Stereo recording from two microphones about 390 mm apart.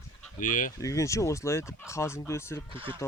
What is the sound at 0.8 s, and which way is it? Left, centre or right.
Speech, centre.